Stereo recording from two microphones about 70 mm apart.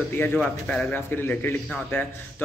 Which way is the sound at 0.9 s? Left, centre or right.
Left.